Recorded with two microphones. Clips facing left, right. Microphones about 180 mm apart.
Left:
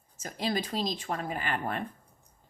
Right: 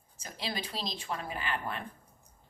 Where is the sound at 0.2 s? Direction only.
45° left (ahead or behind).